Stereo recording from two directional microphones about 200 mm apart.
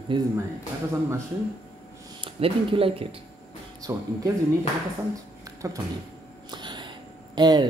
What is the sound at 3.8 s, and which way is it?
Speech, 15° right (ahead or behind).